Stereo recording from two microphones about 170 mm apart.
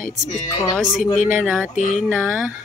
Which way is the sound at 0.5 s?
20° left (ahead or behind).